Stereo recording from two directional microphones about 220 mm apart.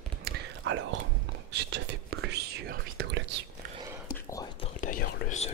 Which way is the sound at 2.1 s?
50° right (ahead or behind).